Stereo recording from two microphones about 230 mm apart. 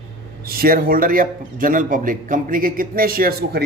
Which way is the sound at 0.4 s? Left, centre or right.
Right.